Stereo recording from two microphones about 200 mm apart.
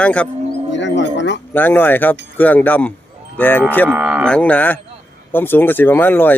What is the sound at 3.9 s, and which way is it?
Cattle, 5° right (ahead or behind).